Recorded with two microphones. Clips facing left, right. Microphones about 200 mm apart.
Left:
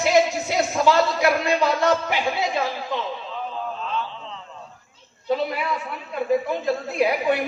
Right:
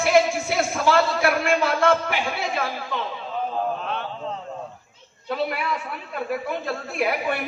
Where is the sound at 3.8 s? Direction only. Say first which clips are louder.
Right 1 dB; 60° right (ahead or behind).